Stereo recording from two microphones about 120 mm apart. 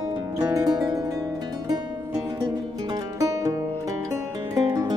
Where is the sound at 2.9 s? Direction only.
30° right (ahead or behind).